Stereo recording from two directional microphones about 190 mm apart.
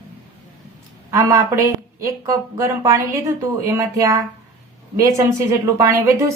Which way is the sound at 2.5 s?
15° right (ahead or behind).